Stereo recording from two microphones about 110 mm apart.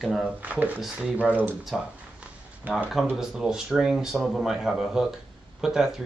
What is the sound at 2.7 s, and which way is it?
Speech, 15° right (ahead or behind).